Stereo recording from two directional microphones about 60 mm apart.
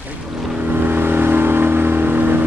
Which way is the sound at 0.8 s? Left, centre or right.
Right.